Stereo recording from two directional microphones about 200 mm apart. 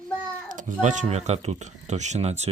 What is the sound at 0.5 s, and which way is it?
Speech, 40° right (ahead or behind).